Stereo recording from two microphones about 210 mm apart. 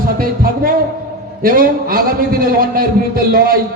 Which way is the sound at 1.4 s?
45° right (ahead or behind).